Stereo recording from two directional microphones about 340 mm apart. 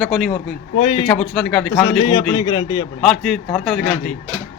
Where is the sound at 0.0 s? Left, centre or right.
Centre.